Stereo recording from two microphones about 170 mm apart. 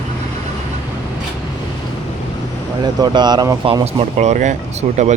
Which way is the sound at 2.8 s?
25° right (ahead or behind).